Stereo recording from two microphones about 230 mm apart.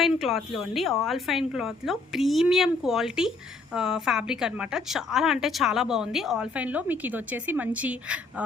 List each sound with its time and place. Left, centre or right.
0.0 s a woman's voice: centre